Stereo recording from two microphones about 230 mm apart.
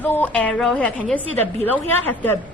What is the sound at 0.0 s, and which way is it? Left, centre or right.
A woman's voice, centre.